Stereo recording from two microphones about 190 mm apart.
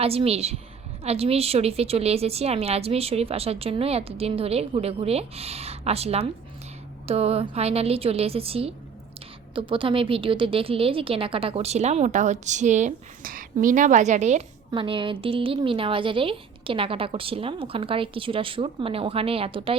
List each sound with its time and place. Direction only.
0.0 s a woman's voice: 30° right (ahead or behind)
14.7 s a woman's voice: 25° right (ahead or behind)